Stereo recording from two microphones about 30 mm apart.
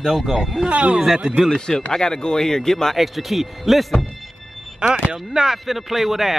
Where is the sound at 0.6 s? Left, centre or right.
Right.